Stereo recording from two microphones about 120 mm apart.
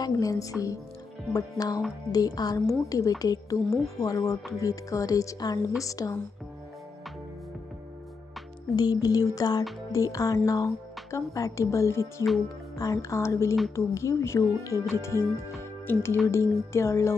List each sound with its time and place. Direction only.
0.0 s a woman's voice: 30° left (ahead or behind)
8.7 s a woman's voice: 35° left (ahead or behind)